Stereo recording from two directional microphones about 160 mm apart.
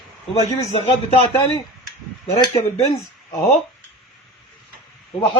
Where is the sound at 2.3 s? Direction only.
40° left (ahead or behind).